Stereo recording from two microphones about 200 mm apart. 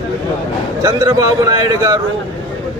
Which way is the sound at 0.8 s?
15° right (ahead or behind).